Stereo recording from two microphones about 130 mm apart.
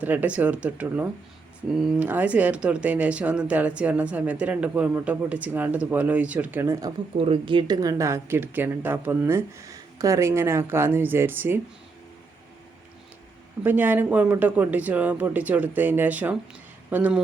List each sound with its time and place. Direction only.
0.0 s speech: 15° right (ahead or behind)
7.2 s speech: 45° right (ahead or behind)
7.8 s speech: 25° right (ahead or behind)
13.7 s speech: 15° right (ahead or behind)